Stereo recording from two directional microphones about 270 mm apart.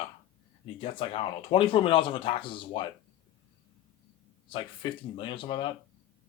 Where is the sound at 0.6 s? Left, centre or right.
Centre.